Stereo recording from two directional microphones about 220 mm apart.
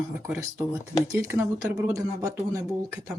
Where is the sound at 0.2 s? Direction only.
15° right (ahead or behind).